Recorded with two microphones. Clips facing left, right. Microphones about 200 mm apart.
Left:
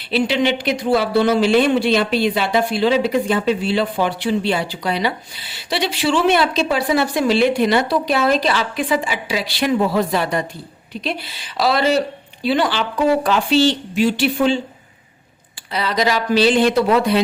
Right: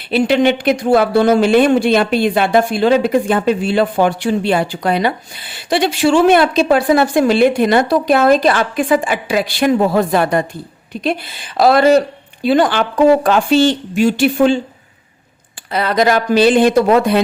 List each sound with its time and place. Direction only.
0.1 s speech: 50° right (ahead or behind)
15.7 s speech: 55° right (ahead or behind)